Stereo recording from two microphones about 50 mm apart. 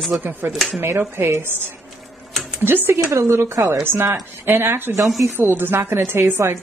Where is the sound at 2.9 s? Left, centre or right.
Right.